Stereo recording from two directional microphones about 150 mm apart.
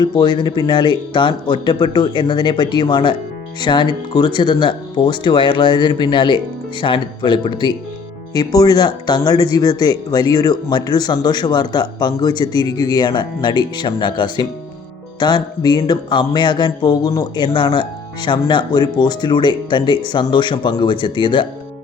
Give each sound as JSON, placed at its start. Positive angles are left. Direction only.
{"t": 0.0, "sound": "speech", "side_deg": 30}